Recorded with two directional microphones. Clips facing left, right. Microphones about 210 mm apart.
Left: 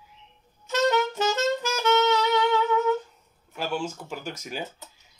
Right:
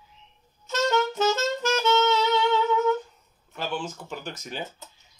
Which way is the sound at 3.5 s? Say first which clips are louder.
Left 2 dB; 10° left (ahead or behind).